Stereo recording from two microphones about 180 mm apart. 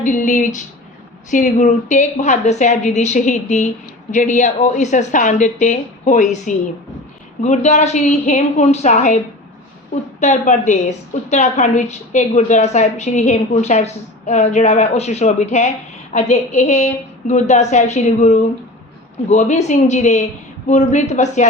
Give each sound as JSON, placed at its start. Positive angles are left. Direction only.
{"t": 0.0, "sound": "a woman's voice", "side_deg": 45}